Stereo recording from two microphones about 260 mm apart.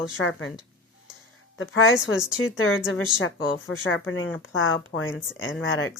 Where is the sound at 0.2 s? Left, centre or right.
Left.